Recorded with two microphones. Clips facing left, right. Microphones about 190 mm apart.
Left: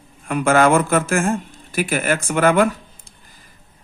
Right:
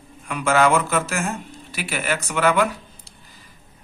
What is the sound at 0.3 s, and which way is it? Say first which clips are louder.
Speech: left 3 dB; 50° left (ahead or behind).